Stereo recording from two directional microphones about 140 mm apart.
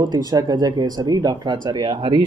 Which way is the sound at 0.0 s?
30° right (ahead or behind).